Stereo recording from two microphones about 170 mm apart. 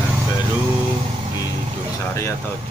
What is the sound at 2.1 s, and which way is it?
Speech, 15° left (ahead or behind).